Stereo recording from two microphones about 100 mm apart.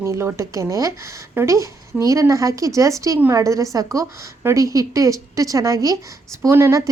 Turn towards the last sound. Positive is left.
turn(degrees=-30)  # may be behind; listen again after turning